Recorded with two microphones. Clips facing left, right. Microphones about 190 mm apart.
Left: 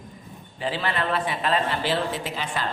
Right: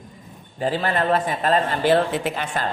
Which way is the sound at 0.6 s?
45° right (ahead or behind).